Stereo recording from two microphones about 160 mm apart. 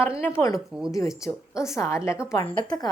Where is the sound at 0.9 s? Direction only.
20° left (ahead or behind).